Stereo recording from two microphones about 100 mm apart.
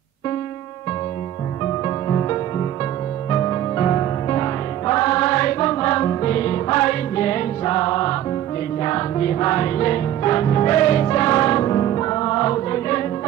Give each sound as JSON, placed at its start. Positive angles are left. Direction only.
{"t": 2.0, "sound": "music", "side_deg": 30}